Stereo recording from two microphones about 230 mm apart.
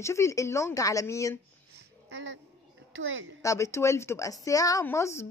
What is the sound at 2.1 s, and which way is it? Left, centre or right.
Speech, right.